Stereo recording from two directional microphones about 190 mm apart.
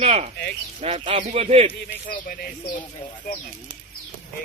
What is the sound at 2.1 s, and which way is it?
Speech, 45° left (ahead or behind).